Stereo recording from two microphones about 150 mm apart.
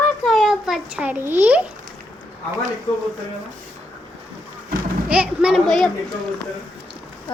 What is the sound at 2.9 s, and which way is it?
Speech, 40° left (ahead or behind).